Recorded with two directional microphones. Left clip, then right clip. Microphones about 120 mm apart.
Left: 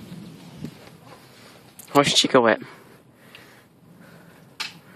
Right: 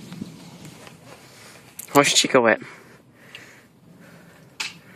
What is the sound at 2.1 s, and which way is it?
Speech, 30° left (ahead or behind).